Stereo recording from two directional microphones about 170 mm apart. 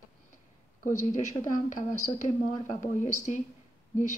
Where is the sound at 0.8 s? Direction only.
45° left (ahead or behind).